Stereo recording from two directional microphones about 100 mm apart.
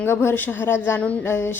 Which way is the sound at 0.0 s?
25° left (ahead or behind).